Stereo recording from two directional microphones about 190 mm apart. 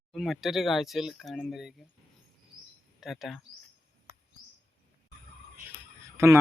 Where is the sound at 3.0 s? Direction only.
Centre (ahead or behind).